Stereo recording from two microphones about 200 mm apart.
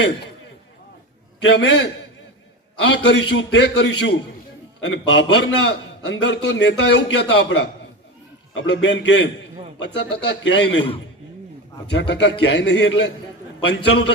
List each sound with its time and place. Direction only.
1.4 s a man's voice: 65° left (ahead or behind)
11.9 s a man's voice: 60° left (ahead or behind)